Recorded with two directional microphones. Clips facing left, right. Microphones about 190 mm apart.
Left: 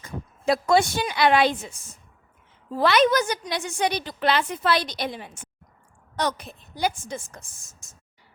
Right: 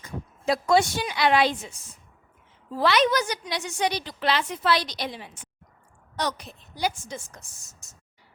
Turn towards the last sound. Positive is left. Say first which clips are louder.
# even
turn(degrees=50)  # may be behind; listen again after turning